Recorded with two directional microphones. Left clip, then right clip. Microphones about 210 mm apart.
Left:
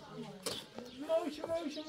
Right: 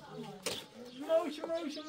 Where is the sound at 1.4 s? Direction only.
5° right (ahead or behind).